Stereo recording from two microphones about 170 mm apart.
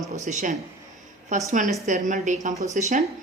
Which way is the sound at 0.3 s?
45° right (ahead or behind).